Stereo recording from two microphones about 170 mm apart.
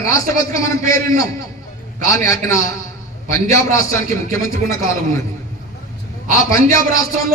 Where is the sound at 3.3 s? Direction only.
20° left (ahead or behind).